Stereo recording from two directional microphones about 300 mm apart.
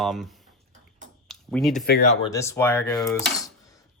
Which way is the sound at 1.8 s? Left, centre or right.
Left.